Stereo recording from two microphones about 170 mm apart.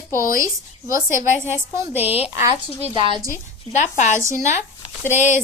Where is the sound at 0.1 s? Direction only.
55° left (ahead or behind).